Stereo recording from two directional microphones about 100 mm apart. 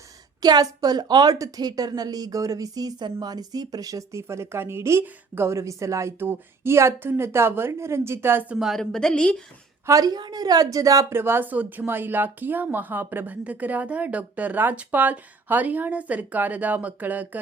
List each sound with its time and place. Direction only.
0.4 s a woman's voice: 40° right (ahead or behind); by 8.5 s 20° right (ahead or behind)
8.5 s a woman's voice: centre (ahead or behind)
9.8 s a woman's voice: 35° right (ahead or behind)
11.2 s a woman's voice: 20° right (ahead or behind)